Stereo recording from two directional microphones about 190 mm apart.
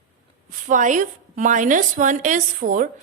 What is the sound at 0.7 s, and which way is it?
A woman's voice, 40° right (ahead or behind).